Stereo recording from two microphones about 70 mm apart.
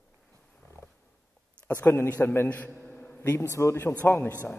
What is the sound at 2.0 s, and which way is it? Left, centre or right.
Speech, left.